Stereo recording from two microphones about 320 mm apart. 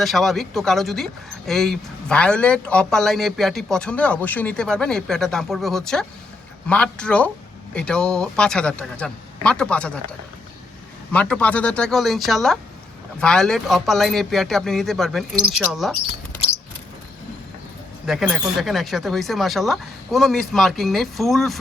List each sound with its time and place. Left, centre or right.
0.0 s speech: centre
11.1 s speech: centre
18.0 s speech: centre